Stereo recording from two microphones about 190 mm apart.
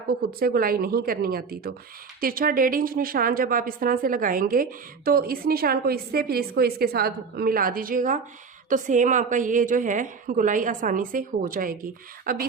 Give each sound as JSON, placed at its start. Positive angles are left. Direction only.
{"t": 0.3, "sound": "a woman's voice", "side_deg": -50}